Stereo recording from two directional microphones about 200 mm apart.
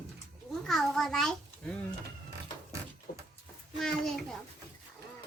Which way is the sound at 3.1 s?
50° left (ahead or behind).